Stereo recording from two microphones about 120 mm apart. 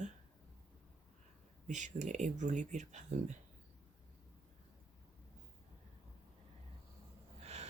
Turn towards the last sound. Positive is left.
turn(degrees=-70)  # may be behind; listen again after turning